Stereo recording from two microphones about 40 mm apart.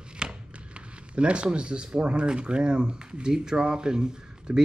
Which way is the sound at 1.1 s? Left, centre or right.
Right.